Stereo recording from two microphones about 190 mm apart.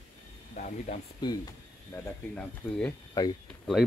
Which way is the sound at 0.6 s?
40° left (ahead or behind).